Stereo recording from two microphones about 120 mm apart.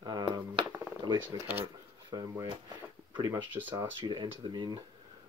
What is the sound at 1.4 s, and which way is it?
Speech, 15° right (ahead or behind).